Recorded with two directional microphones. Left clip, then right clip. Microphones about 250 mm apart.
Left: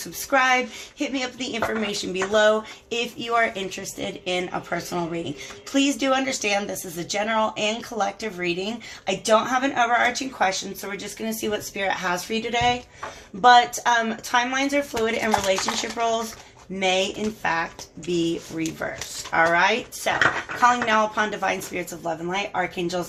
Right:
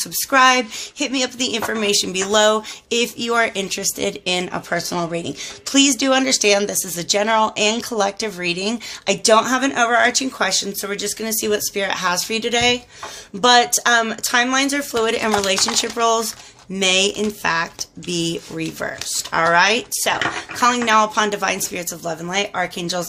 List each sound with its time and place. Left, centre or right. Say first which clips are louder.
0.0 s speech: right 7 dB; right
17.4 s speech: right 3 dB; right